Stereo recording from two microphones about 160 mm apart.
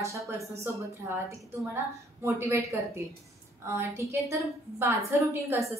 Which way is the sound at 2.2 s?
20° right (ahead or behind).